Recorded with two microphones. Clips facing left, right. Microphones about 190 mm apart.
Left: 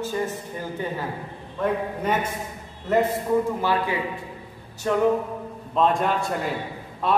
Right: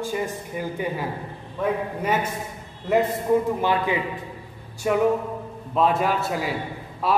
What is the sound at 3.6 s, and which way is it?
A man's voice, 20° right (ahead or behind).